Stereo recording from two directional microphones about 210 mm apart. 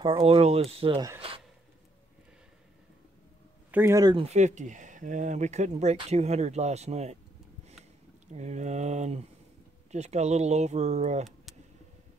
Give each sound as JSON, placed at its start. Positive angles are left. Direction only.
{"t": 0.0, "sound": "speech", "side_deg": -25}
{"t": 3.7, "sound": "speech", "side_deg": -15}
{"t": 8.3, "sound": "speech", "side_deg": -35}